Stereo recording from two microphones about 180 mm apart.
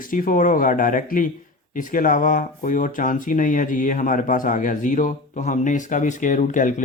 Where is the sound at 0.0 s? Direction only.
50° left (ahead or behind).